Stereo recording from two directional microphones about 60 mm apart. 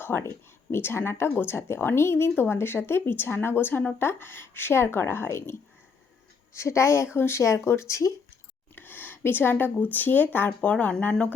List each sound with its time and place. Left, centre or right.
0.0 s a woman's voice: left
8.7 s speech: left